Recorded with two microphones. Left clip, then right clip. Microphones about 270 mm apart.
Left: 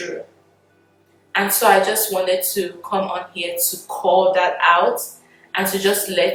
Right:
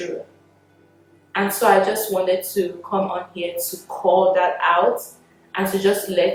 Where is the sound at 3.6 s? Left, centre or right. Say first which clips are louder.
Left 2 dB; right.